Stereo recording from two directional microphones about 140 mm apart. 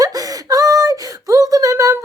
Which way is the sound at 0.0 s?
25° right (ahead or behind).